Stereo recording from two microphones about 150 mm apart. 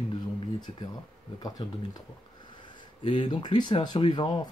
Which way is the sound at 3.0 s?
30° left (ahead or behind).